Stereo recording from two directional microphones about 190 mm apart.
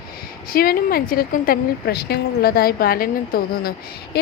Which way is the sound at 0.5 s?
50° left (ahead or behind).